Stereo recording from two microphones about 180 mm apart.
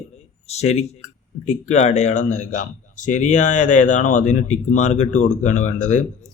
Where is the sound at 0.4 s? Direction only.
35° left (ahead or behind).